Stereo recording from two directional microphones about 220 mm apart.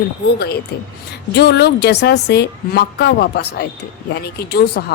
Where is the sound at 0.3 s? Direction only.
45° left (ahead or behind).